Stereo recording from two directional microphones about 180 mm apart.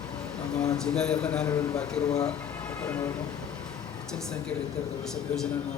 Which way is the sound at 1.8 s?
5° left (ahead or behind).